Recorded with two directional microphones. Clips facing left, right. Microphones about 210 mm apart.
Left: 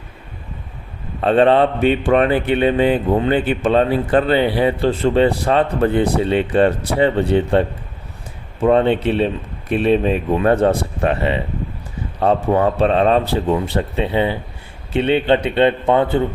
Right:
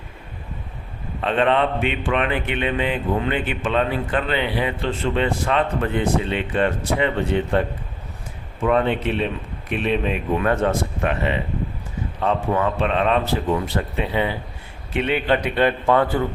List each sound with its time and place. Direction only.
1.2 s speech: 35° left (ahead or behind)
8.6 s a man's voice: 30° left (ahead or behind)